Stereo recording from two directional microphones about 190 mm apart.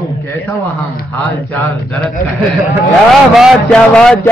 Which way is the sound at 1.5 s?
5° left (ahead or behind).